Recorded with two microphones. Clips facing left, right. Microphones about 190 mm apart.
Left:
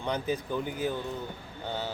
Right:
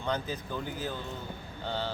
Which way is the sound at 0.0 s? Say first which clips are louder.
Left 3 dB; 15° left (ahead or behind).